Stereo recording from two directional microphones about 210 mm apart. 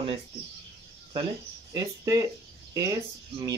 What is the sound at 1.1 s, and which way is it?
Speech, 20° right (ahead or behind).